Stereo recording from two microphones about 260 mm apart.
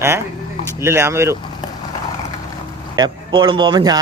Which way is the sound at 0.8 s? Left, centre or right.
Centre.